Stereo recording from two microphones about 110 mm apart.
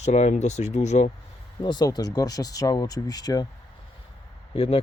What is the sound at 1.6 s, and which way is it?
Speech, 40° left (ahead or behind).